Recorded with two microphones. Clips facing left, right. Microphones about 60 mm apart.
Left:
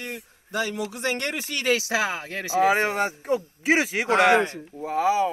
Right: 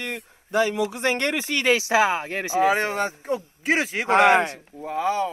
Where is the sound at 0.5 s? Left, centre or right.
Right.